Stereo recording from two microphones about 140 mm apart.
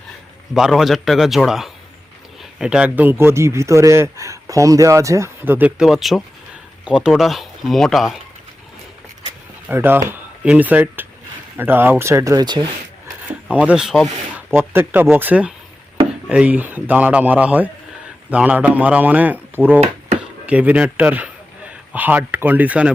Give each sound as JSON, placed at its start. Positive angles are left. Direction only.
{"t": 0.5, "sound": "speech", "side_deg": -5}
{"t": 9.6, "sound": "speech", "side_deg": -15}
{"t": 13.5, "sound": "speech", "side_deg": -10}
{"t": 14.5, "sound": "a man's voice", "side_deg": -15}